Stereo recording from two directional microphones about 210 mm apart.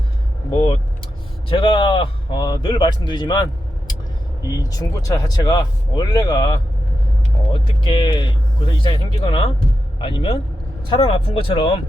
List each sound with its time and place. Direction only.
0.5 s a man's voice: 25° left (ahead or behind)